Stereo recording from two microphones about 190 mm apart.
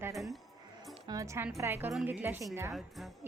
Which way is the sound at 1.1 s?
15° right (ahead or behind).